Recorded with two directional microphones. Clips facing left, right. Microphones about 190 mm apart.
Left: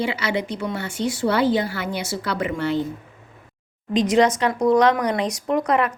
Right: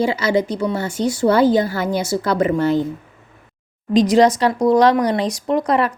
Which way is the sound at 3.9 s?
35° right (ahead or behind).